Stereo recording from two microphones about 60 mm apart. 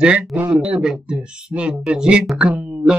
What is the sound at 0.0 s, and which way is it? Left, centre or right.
Speech, centre.